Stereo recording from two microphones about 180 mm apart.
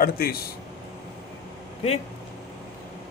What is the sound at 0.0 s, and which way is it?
Speech, 55° left (ahead or behind).